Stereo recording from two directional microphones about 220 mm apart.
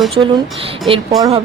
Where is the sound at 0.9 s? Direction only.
20° right (ahead or behind).